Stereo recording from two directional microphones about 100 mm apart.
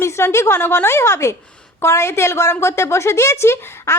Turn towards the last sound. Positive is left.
turn(degrees=25)  # may be behind; listen again after turning